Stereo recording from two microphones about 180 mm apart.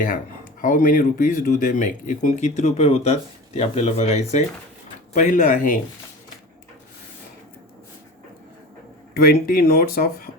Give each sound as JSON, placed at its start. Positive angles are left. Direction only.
{"t": 0.6, "sound": "speech", "side_deg": 50}
{"t": 9.1, "sound": "speech", "side_deg": 60}